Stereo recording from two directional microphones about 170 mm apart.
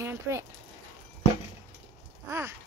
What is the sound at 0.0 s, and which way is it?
Speech, 15° right (ahead or behind).